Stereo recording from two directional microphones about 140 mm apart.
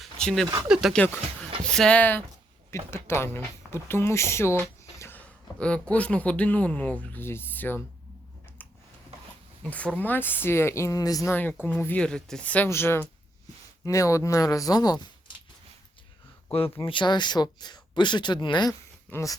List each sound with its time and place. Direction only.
0.0 s a sound: 5° left (ahead or behind)
0.7 s speech: 5° right (ahead or behind)
0.9 s speech: 10° left (ahead or behind)
8.6 s a sound: 10° left (ahead or behind)
9.6 s speech: 10° left (ahead or behind); by 11.3 s 25° left (ahead or behind)
11.3 s speech: 10° left (ahead or behind); by 15.0 s 30° left (ahead or behind)
16.5 s speech: 40° left (ahead or behind); by 19.4 s 25° left (ahead or behind)